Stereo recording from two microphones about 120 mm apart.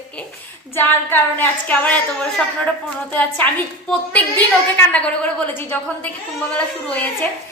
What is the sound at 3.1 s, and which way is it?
A woman's voice, 10° left (ahead or behind).